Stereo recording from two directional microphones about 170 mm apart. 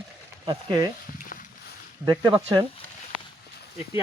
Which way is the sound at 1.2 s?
55° left (ahead or behind).